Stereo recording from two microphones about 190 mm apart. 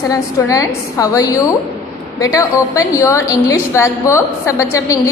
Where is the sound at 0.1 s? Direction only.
20° left (ahead or behind).